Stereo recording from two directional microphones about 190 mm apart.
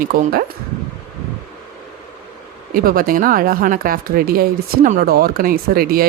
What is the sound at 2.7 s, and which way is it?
Speech, 50° right (ahead or behind).